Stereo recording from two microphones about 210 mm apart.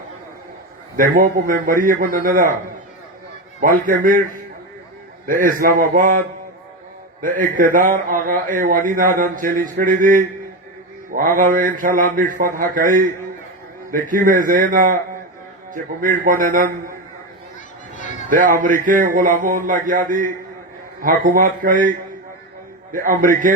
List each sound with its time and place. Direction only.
0.9 s a man's voice: 40° right (ahead or behind)
3.6 s a man's voice: 40° right (ahead or behind)
5.2 s a man's voice: 40° right (ahead or behind)
18.3 s a man's voice: 40° right (ahead or behind)
22.9 s a man's voice: 40° right (ahead or behind)